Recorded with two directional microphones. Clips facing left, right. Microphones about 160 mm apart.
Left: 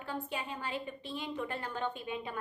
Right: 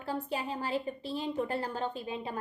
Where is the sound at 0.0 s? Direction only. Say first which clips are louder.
Right 4 dB; 35° right (ahead or behind).